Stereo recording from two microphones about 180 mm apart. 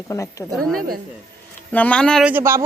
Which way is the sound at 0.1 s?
15° left (ahead or behind).